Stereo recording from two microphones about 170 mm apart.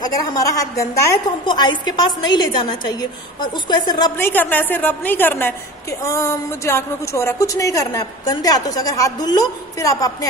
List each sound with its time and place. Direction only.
0.0 s a woman's voice: 20° left (ahead or behind)
4.2 s a woman's voice: 10° left (ahead or behind)